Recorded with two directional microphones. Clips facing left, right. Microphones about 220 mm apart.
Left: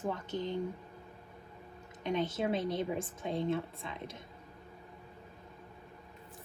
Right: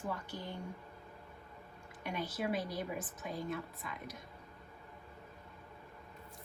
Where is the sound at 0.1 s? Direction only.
20° left (ahead or behind).